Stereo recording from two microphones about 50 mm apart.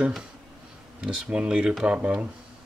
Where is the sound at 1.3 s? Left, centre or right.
Centre.